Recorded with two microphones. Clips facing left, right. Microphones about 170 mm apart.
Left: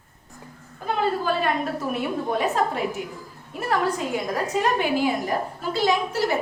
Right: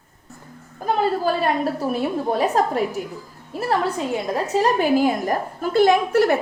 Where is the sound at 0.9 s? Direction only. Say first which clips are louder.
Right 3 dB; 35° right (ahead or behind).